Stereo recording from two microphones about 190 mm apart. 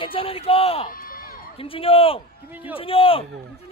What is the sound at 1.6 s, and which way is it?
Speech, 30° left (ahead or behind).